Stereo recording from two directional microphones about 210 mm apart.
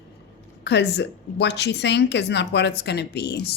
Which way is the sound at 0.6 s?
55° left (ahead or behind).